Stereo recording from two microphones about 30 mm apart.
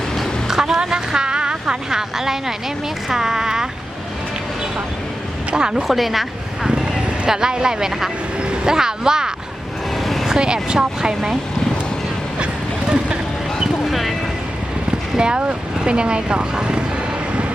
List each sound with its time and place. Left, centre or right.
0.4 s a sound: centre
0.9 s vehicle: right
3.1 s a sound: centre
5.5 s speech: right
5.9 s speech: centre
6.7 s speech: right
8.4 s vehicle: right
8.7 s speech: right
10.0 s vehicle: centre
10.2 s speech: right
13.8 s clip-clop: centre
15.2 s speech: right